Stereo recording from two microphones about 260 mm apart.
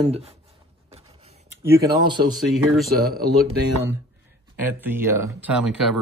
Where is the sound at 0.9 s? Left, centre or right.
Right.